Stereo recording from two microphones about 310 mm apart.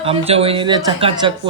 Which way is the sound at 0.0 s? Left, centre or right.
Centre.